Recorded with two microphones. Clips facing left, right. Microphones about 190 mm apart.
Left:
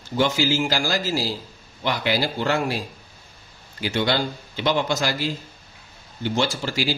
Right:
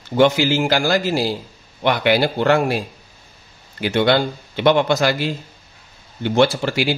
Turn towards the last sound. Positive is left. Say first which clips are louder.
# right 6 dB
turn(degrees=-60)  # may be behind; listen again after turning